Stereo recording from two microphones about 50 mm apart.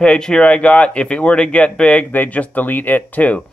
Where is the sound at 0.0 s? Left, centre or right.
Centre.